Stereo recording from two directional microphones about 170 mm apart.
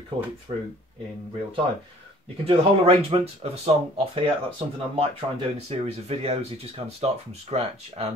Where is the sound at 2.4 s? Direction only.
35° right (ahead or behind).